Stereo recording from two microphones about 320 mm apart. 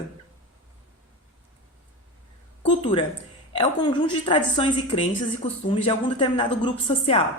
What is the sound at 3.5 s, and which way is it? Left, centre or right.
Speech, centre.